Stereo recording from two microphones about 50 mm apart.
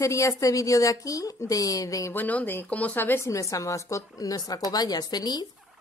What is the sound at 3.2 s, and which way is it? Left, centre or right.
Speech, left.